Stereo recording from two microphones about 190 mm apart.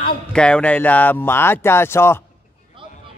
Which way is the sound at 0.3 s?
5° left (ahead or behind).